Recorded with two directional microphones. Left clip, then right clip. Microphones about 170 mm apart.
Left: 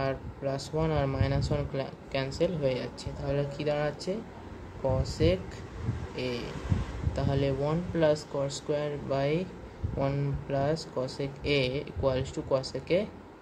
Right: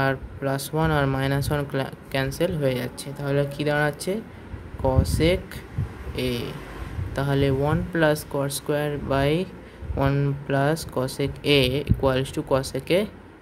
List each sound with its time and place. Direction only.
0.0 s speech: 55° right (ahead or behind)